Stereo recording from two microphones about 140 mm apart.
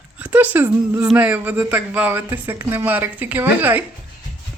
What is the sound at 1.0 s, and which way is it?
Speech, 10° right (ahead or behind).